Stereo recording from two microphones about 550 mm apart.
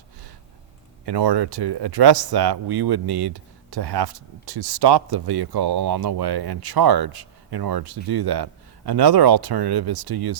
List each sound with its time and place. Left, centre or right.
1.0 s speech: right